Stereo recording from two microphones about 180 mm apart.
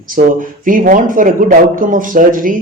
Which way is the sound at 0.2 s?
45° right (ahead or behind).